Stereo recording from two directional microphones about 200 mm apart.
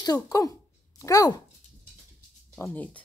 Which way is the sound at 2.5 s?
10° left (ahead or behind).